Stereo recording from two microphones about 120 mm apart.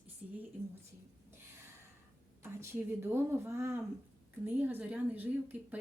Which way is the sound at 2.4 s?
20° right (ahead or behind).